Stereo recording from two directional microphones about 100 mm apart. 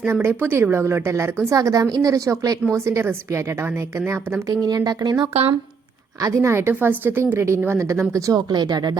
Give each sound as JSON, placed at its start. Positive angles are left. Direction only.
{"t": 0.1, "sound": "a woman's voice", "side_deg": -25}
{"t": 4.6, "sound": "speech", "side_deg": -40}
{"t": 5.3, "sound": "speech", "side_deg": -80}
{"t": 6.2, "sound": "a woman's voice", "side_deg": -30}